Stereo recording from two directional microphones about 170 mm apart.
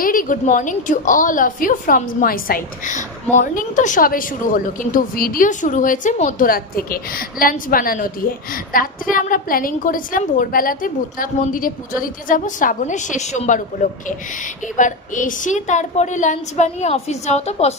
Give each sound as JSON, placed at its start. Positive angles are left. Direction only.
{"t": 0.0, "sound": "a woman's voice", "side_deg": 55}